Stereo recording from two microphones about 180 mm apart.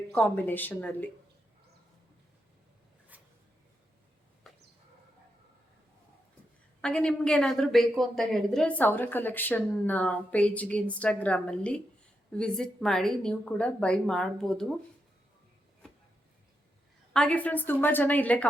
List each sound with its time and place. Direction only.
0.1 s a woman's voice: 10° left (ahead or behind)
3.1 s a sound: 10° right (ahead or behind)
4.4 s chicken: centre (ahead or behind)
6.8 s a woman's voice: 5° left (ahead or behind)
17.2 s a woman's voice: 5° left (ahead or behind)